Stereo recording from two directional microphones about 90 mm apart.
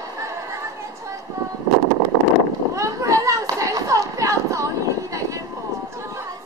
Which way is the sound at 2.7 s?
35° right (ahead or behind).